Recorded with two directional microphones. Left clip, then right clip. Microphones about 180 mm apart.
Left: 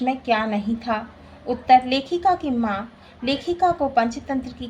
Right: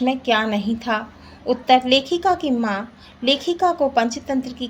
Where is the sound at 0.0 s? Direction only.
40° right (ahead or behind).